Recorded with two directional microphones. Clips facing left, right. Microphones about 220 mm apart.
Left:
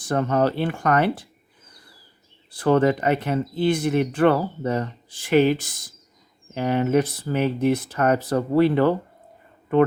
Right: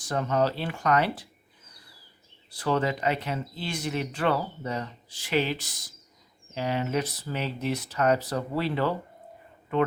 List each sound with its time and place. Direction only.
0.0 s speech: 55° left (ahead or behind)
2.5 s speech: 50° left (ahead or behind)